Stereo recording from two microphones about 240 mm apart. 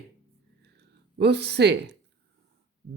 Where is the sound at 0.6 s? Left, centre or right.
Right.